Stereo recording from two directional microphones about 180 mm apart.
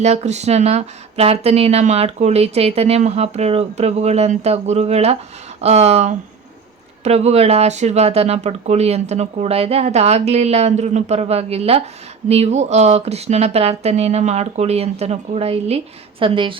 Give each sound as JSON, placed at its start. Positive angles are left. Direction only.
{"t": 0.0, "sound": "a woman's voice", "side_deg": -40}